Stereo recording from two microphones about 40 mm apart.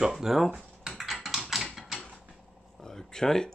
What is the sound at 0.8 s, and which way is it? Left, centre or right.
Typing, centre.